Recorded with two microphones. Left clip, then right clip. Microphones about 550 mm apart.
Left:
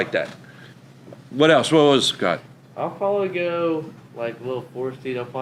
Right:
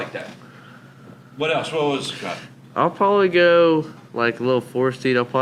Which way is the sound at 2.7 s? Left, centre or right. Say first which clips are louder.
Right 5 dB; right.